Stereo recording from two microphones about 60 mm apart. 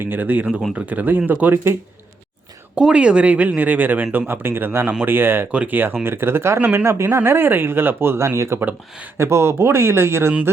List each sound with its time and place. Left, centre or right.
0.0 s speech: right
2.7 s speech: centre; by 5.5 s right
5.5 s speech: right